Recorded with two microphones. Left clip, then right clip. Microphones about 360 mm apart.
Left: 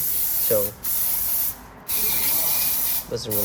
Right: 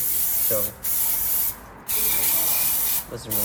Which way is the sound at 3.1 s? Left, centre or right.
Left.